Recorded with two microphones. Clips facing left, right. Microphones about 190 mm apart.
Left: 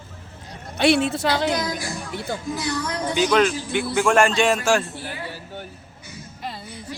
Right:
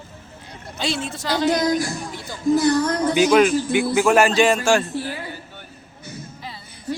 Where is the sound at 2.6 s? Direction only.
50° right (ahead or behind).